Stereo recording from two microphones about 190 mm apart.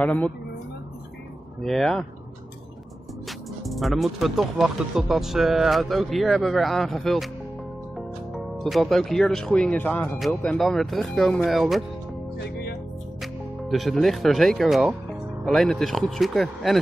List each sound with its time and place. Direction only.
0.0 s speech: 5° left (ahead or behind)
1.6 s speech: centre (ahead or behind)
3.3 s speech: centre (ahead or behind)
8.3 s speech: centre (ahead or behind)
12.4 s music: 55° left (ahead or behind)
13.2 s speech: centre (ahead or behind)